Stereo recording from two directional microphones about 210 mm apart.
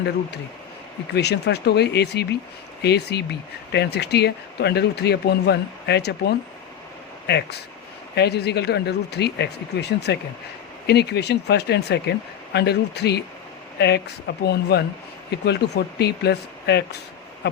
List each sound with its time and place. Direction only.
1.1 s speech: 50° left (ahead or behind)